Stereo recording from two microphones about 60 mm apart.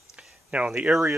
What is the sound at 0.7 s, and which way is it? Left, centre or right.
Speech, centre.